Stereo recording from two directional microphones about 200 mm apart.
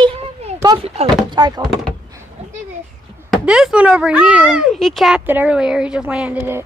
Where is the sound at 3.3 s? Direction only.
Centre (ahead or behind).